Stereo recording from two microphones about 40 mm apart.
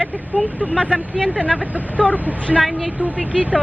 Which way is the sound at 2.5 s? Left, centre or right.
Centre.